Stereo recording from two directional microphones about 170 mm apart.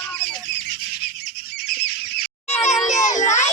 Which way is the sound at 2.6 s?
45° left (ahead or behind).